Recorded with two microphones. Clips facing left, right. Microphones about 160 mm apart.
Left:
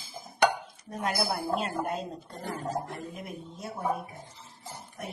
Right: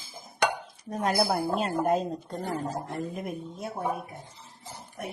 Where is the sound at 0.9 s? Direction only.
40° right (ahead or behind).